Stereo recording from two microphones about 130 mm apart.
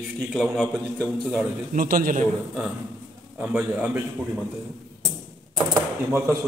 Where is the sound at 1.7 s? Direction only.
90° right.